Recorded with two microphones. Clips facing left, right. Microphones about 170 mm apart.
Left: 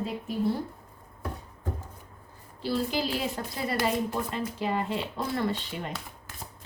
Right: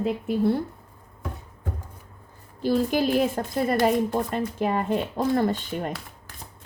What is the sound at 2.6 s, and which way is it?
A woman's voice, 50° right (ahead or behind).